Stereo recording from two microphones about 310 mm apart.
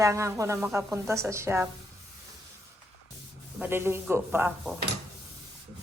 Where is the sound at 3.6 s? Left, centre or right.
Centre.